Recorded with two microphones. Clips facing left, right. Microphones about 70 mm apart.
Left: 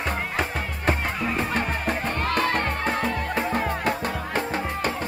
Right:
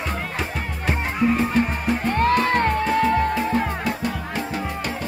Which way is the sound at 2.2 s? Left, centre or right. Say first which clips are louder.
Right 5 dB; right.